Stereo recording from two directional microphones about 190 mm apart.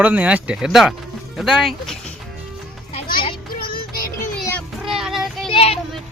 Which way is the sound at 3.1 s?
50° left (ahead or behind).